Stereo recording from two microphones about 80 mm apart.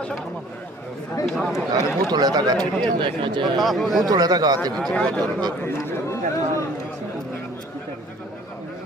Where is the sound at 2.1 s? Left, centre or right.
Right.